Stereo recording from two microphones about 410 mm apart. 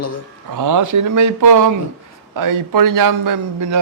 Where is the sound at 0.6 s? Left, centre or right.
Right.